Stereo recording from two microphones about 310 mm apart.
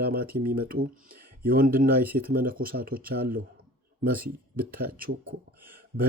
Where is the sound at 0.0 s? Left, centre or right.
Right.